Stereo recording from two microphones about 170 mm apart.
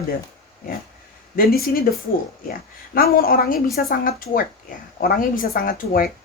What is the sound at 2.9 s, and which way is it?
Speech, 60° left (ahead or behind).